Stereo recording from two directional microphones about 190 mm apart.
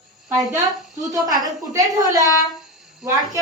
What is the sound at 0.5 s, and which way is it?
A woman's voice, 20° right (ahead or behind).